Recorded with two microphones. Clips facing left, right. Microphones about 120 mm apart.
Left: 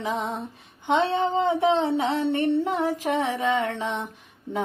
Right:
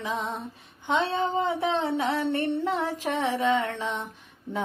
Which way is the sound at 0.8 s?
55° left (ahead or behind).